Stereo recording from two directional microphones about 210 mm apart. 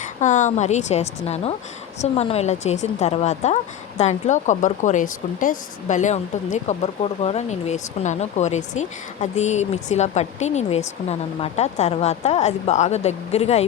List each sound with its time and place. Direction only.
0.0 s a woman's voice: 35° left (ahead or behind)